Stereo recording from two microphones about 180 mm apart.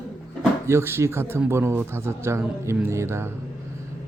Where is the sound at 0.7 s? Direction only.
15° right (ahead or behind).